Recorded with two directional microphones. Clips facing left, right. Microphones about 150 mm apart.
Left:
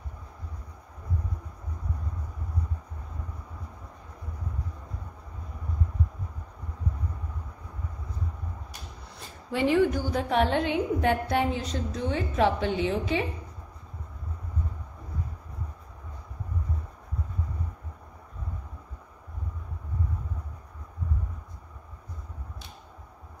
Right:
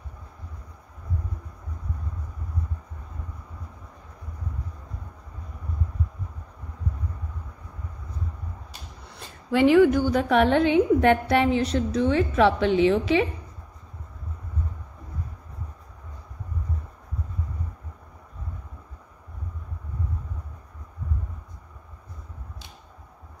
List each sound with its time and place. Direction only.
9.5 s a woman's voice: 90° right